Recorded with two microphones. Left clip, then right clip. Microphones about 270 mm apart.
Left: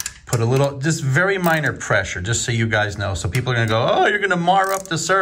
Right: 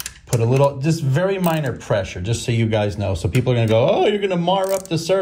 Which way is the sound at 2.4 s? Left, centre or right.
Left.